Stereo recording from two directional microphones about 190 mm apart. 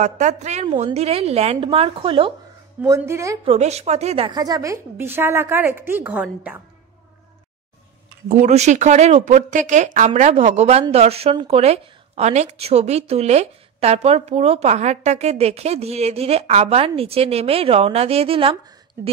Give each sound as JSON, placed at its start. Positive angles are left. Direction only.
{"t": 0.0, "sound": "speech", "side_deg": -40}
{"t": 2.8, "sound": "a woman's voice", "side_deg": -15}
{"t": 3.4, "sound": "a woman's voice", "side_deg": -35}
{"t": 8.3, "sound": "speech", "side_deg": -35}